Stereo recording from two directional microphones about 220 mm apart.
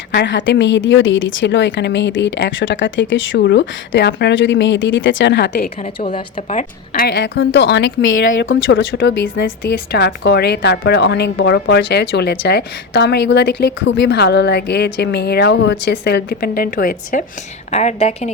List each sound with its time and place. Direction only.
0.1 s speech: 55° left (ahead or behind)
5.8 s a woman's voice: 25° left (ahead or behind)